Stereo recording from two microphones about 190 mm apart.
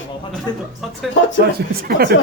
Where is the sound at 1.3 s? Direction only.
50° right (ahead or behind).